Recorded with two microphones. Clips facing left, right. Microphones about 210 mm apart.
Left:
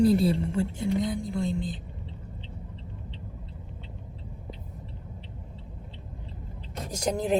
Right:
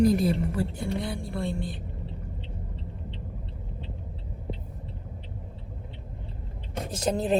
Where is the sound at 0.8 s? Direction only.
20° left (ahead or behind).